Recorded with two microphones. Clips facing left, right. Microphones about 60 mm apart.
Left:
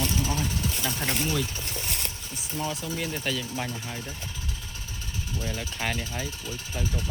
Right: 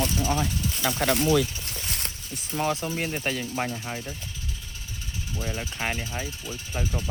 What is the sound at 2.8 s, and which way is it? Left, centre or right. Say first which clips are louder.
Speech: right 2 dB; right.